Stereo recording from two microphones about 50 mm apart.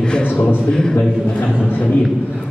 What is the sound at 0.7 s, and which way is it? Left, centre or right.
Speech, centre.